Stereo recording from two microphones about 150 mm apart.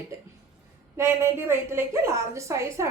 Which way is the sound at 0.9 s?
15° right (ahead or behind).